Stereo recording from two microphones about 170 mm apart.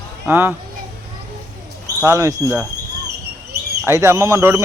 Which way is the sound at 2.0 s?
20° right (ahead or behind).